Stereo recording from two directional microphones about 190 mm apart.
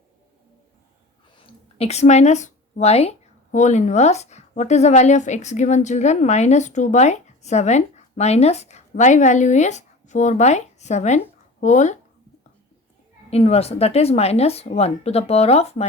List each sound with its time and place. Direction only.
1.8 s speech: 35° left (ahead or behind)
13.3 s speech: 35° left (ahead or behind)